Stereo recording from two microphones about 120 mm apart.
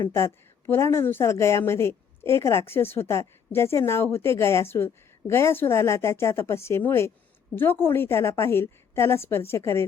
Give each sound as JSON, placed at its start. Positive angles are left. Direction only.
{"t": 0.1, "sound": "a woman's voice", "side_deg": 20}